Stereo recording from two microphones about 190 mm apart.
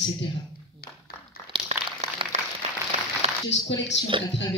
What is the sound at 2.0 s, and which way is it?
Applause, 35° right (ahead or behind).